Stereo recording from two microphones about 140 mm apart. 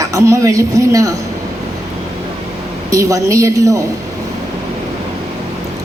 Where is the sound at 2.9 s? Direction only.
25° right (ahead or behind).